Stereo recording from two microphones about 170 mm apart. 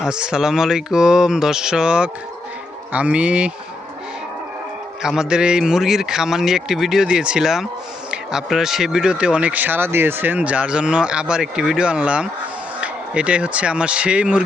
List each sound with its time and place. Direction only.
0.0 s speech: 5° right (ahead or behind)
5.0 s speech: 5° right (ahead or behind)